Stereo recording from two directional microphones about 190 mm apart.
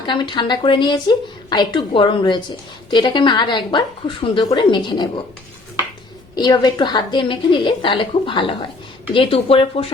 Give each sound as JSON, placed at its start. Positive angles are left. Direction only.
{"t": 0.0, "sound": "a woman's voice", "side_deg": 25}
{"t": 6.3, "sound": "a woman's voice", "side_deg": 20}